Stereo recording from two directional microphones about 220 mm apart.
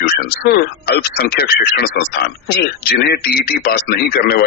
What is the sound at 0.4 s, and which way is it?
Speech, 45° left (ahead or behind).